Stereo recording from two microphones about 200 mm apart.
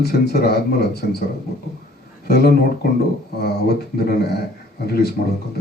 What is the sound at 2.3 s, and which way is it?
Speech, 55° left (ahead or behind).